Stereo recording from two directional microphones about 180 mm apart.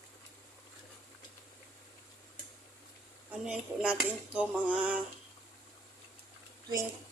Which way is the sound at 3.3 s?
5° right (ahead or behind).